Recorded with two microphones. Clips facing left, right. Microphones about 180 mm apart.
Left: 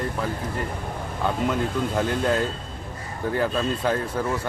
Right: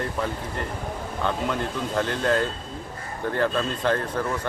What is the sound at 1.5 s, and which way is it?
Speech, 10° left (ahead or behind).